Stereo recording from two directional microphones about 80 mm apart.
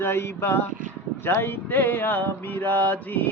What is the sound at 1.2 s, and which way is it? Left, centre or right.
Mantra, left.